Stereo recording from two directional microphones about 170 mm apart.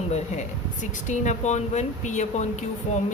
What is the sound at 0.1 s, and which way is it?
Speech, 45° left (ahead or behind).